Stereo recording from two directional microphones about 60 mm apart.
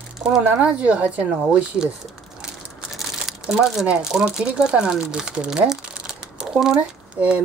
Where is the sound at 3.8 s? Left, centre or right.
Centre.